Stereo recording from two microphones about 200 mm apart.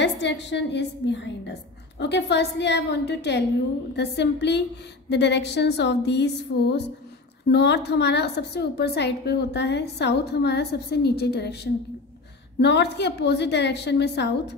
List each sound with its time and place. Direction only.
0.0 s a woman's voice: 60° left (ahead or behind)